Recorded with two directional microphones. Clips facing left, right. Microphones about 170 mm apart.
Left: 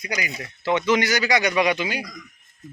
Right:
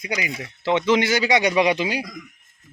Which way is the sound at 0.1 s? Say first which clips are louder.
Right 2 dB; 25° right (ahead or behind).